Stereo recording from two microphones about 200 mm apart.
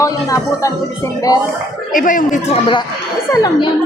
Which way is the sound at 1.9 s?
40° left (ahead or behind).